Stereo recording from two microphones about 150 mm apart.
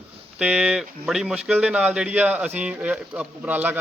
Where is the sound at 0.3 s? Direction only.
5° right (ahead or behind).